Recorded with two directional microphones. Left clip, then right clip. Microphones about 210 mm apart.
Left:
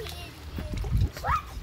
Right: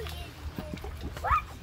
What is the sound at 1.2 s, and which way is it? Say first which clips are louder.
Dog: right 1 dB; 5° left (ahead or behind).